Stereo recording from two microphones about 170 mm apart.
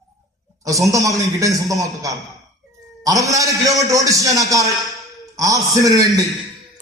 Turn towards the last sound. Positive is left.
turn(degrees=-20)  # may be behind; listen again after turning